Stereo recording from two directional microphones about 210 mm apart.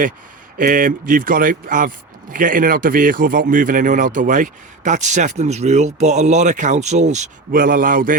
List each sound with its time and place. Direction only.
0.6 s speech: 40° right (ahead or behind)